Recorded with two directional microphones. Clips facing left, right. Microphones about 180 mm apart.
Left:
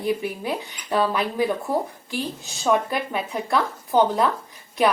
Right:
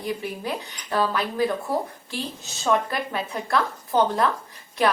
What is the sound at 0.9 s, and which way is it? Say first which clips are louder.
Speech: left 2 dB; 15° left (ahead or behind).